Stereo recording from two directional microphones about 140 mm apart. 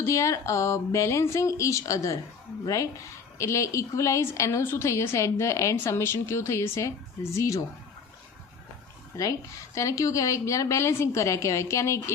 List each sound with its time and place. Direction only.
0.0 s a woman's voice: 20° left (ahead or behind)
9.7 s a woman's voice: 25° left (ahead or behind)